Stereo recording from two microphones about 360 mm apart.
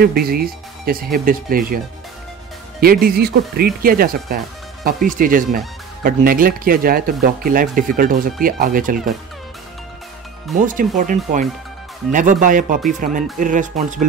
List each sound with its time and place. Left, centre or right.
0.0 s speech: right
2.8 s speech: right
10.6 s speech: right